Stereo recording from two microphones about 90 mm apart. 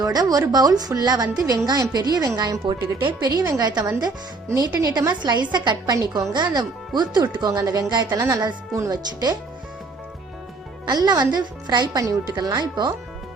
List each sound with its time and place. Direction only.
0.0 s a woman's voice: 45° right (ahead or behind)
6.3 s a woman's voice: 55° right (ahead or behind)
7.6 s a woman's voice: 40° right (ahead or behind)
7.9 s a woman's voice: 50° right (ahead or behind)
10.8 s a woman's voice: 50° right (ahead or behind)
11.9 s a woman's voice: 35° right (ahead or behind)
12.3 s a woman's voice: 50° right (ahead or behind)